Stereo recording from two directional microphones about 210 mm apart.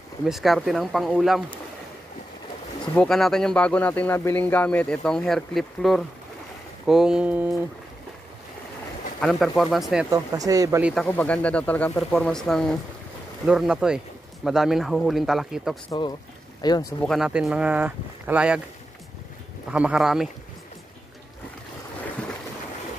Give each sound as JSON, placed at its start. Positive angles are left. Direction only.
{"t": 0.2, "sound": "speech", "side_deg": 0}
{"t": 2.8, "sound": "speech", "side_deg": 5}
{"t": 9.2, "sound": "speech", "side_deg": 0}
{"t": 10.1, "sound": "speech", "side_deg": -15}
{"t": 10.8, "sound": "speech", "side_deg": -5}
{"t": 11.1, "sound": "speech", "side_deg": 5}
{"t": 16.6, "sound": "speech", "side_deg": 20}
{"t": 17.0, "sound": "speech", "side_deg": 0}
{"t": 19.7, "sound": "speech", "side_deg": -5}